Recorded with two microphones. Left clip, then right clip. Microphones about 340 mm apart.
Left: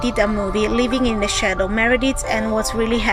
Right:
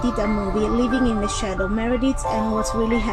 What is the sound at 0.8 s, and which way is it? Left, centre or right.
Speech, left.